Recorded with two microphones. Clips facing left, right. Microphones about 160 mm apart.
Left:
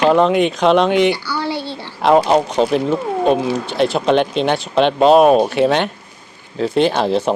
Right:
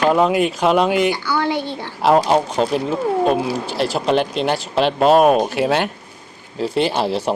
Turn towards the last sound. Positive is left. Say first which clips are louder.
# left 4 dB
turn(degrees=-10)  # may be behind; listen again after turning